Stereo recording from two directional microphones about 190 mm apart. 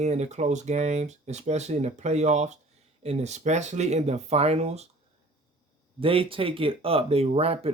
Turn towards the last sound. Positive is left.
turn(degrees=-30)  # may be behind; listen again after turning